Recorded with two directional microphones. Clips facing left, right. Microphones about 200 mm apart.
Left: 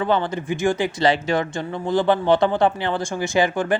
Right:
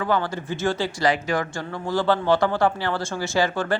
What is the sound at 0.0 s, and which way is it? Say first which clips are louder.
Speech: left 3 dB; 20° left (ahead or behind).